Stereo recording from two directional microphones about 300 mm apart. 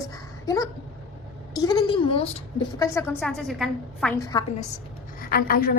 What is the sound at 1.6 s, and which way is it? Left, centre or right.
A woman's voice, centre.